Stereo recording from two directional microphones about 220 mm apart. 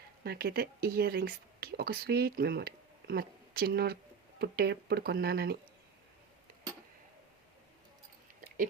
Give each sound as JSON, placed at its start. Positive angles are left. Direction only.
{"t": 0.3, "sound": "speech", "side_deg": -45}